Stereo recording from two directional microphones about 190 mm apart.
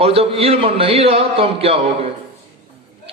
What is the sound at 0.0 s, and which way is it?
A man's voice, 30° right (ahead or behind).